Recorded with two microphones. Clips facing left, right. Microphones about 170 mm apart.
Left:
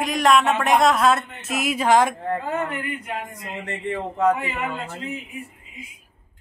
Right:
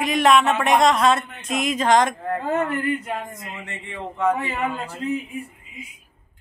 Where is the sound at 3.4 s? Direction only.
35° left (ahead or behind).